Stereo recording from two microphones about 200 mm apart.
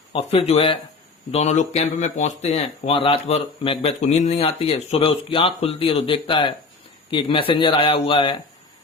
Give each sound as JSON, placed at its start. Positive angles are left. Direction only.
{"t": 0.1, "sound": "speech", "side_deg": 30}